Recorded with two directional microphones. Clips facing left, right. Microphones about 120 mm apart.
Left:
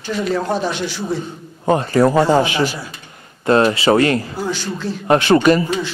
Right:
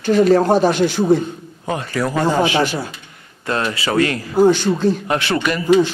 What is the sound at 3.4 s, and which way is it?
Speech, 30° left (ahead or behind).